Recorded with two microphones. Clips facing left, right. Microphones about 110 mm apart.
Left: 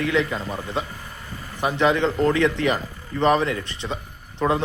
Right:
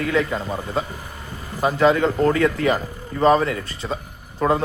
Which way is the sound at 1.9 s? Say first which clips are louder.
Right 2 dB; 10° right (ahead or behind).